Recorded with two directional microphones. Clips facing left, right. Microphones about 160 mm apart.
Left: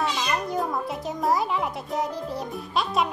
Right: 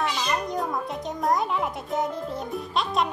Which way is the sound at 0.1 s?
Centre (ahead or behind).